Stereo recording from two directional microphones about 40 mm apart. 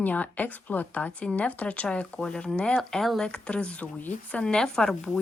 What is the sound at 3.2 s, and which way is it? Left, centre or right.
Speech, left.